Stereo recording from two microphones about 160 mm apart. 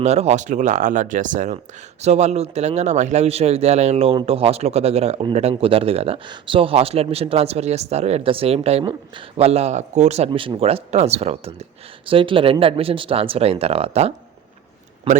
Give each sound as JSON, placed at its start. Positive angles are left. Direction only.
{"t": 0.0, "sound": "speech", "side_deg": -45}